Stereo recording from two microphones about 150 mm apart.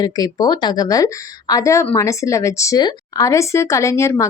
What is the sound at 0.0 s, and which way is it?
A woman's voice, 25° left (ahead or behind).